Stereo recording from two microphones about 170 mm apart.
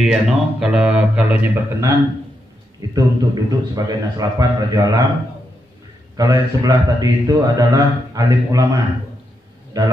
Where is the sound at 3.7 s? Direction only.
20° right (ahead or behind).